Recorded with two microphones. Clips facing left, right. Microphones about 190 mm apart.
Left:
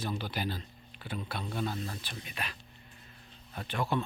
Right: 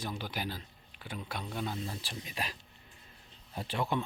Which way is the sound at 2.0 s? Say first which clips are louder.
Right 2 dB; 30° right (ahead or behind).